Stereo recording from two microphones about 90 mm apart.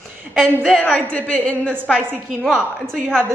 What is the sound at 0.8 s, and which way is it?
Speech, 15° left (ahead or behind).